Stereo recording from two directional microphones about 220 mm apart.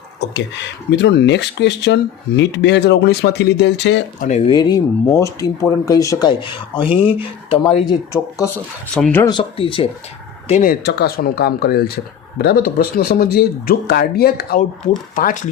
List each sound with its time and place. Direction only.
0.3 s speech: 50° left (ahead or behind)
4.3 s speech: 20° left (ahead or behind); by 9.2 s 5° left (ahead or behind)
9.2 s speech: 20° left (ahead or behind)
10.5 s speech: 40° left (ahead or behind)